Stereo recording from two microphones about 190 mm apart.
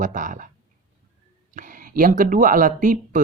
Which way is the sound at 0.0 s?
45° right (ahead or behind).